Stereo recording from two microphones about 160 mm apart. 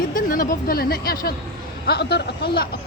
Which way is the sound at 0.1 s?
60° left (ahead or behind).